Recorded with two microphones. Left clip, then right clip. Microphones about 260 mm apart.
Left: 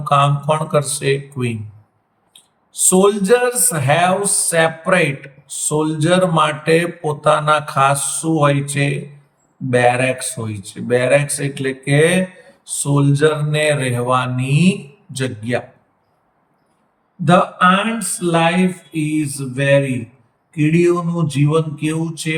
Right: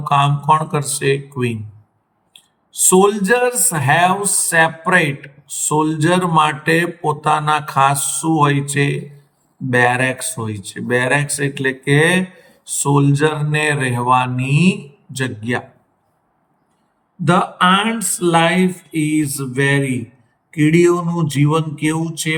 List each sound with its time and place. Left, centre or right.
0.0 s speech: centre
2.3 s speech: centre
17.2 s speech: centre